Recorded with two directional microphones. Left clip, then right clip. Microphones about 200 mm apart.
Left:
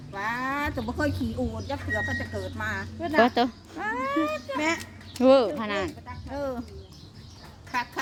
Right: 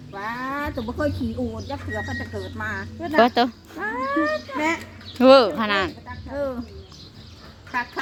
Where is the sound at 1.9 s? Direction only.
35° left (ahead or behind).